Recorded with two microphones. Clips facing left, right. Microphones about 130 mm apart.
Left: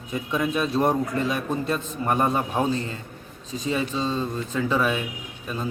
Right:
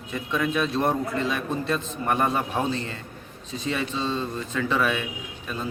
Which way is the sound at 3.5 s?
35° left (ahead or behind).